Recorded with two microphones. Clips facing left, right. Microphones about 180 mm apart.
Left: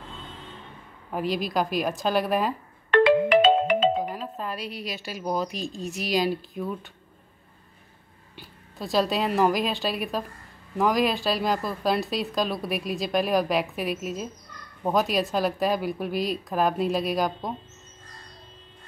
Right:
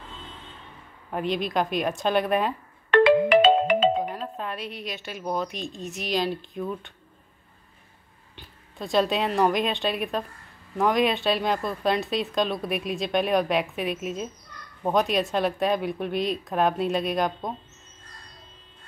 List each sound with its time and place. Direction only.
1.1 s speech: centre (ahead or behind)
2.9 s music: 65° right (ahead or behind)
4.1 s speech: centre (ahead or behind)
8.4 s speech: centre (ahead or behind)